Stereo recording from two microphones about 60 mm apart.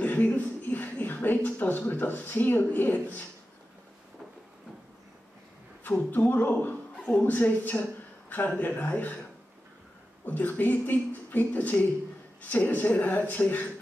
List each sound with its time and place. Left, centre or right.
0.0 s speech: left
5.9 s speech: left
7.0 s speech: centre
7.3 s speech: left